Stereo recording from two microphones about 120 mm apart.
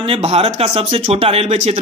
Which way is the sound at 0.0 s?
55° right (ahead or behind).